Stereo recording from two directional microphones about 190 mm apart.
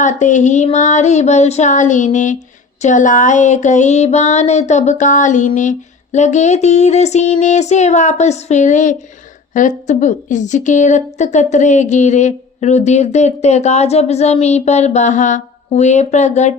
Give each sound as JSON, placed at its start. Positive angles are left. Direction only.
{"t": 0.0, "sound": "a woman's voice", "side_deg": 40}